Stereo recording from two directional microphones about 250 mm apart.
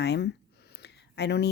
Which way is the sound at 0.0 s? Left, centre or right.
Left.